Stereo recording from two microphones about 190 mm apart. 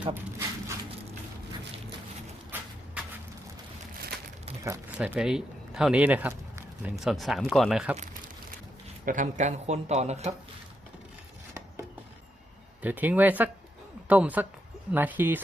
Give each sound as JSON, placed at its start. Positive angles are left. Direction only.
{"t": 0.0, "sound": "speech", "side_deg": -10}
{"t": 3.0, "sound": "a sound", "side_deg": -5}
{"t": 4.6, "sound": "speech", "side_deg": -15}
{"t": 9.0, "sound": "speech", "side_deg": -40}
{"t": 12.8, "sound": "speech", "side_deg": -10}